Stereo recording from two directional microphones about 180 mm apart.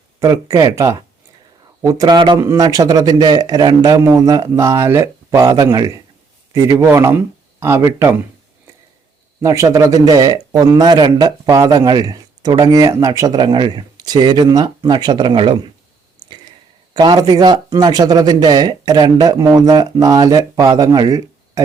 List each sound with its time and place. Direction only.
0.2 s speech: 20° right (ahead or behind)
9.4 s speech: 15° right (ahead or behind)
16.9 s speech: 25° right (ahead or behind)